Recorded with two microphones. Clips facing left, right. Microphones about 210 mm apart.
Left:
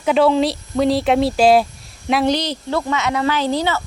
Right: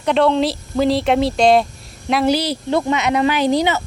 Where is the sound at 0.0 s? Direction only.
5° left (ahead or behind).